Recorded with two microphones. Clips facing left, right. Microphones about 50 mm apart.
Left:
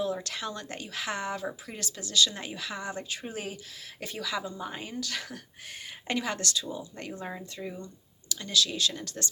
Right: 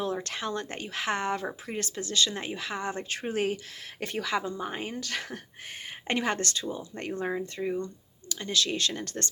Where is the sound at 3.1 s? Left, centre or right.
Right.